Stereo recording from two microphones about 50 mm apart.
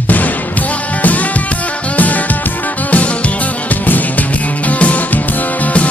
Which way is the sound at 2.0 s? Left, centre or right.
Left.